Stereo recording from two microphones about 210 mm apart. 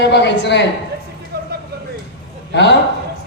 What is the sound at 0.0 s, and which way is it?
Speech, 55° left (ahead or behind).